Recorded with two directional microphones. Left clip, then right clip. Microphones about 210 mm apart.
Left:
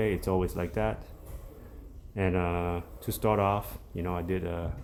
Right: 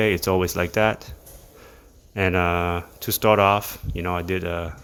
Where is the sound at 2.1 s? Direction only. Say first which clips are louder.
Right 9 dB; 30° right (ahead or behind).